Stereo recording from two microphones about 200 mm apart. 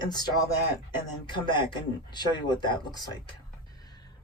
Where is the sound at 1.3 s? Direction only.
25° left (ahead or behind).